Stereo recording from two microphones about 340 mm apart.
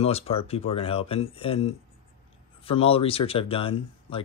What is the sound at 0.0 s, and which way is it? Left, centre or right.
Speech, centre.